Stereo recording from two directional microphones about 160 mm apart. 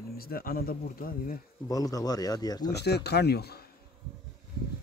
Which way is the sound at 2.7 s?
90° left.